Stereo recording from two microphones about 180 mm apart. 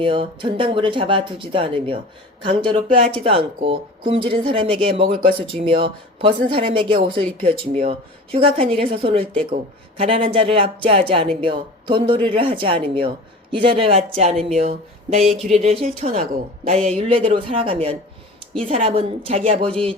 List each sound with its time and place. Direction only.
0.0 s speech: 30° right (ahead or behind)
18.9 s speech: 35° right (ahead or behind)